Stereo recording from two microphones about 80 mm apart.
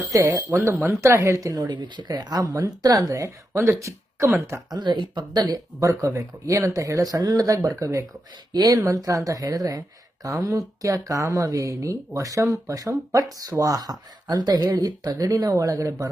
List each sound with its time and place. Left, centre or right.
0.1 s speech: right
4.7 s speech: right
5.8 s speech: right